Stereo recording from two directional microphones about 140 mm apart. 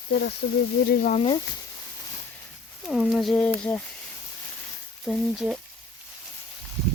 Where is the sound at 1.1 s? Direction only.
40° left (ahead or behind).